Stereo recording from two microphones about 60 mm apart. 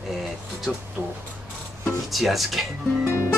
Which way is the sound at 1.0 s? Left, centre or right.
Right.